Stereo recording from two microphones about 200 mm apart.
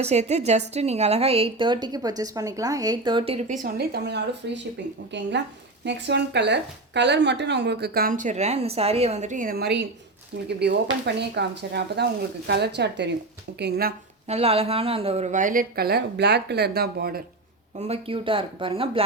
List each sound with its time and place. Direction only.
0.0 s a woman's voice: 35° right (ahead or behind); by 13.9 s 55° right (ahead or behind)
14.3 s speech: 30° right (ahead or behind); by 17.2 s 50° right (ahead or behind)
17.7 s a woman's voice: 30° right (ahead or behind)